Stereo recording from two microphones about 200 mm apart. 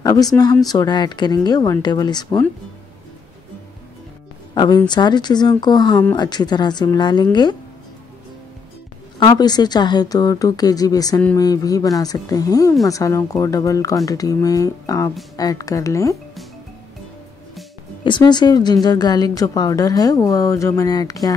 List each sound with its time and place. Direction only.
0.0 s a woman's voice: 15° left (ahead or behind)
4.6 s a woman's voice: 20° left (ahead or behind)
9.2 s a woman's voice: 20° left (ahead or behind)
18.0 s a woman's voice: 20° left (ahead or behind)